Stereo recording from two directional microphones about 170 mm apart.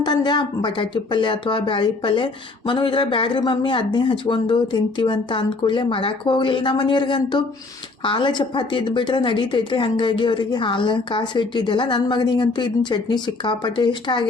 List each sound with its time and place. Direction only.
0.0 s speech: 25° left (ahead or behind)